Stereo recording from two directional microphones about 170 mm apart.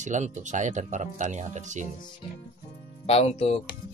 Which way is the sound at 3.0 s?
35° left (ahead or behind).